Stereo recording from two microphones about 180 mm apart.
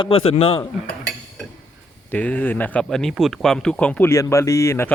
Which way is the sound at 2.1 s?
10° left (ahead or behind).